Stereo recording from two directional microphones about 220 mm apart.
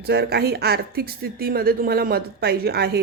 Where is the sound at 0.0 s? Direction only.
45° right (ahead or behind).